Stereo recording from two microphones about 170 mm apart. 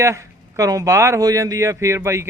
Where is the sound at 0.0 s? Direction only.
15° right (ahead or behind).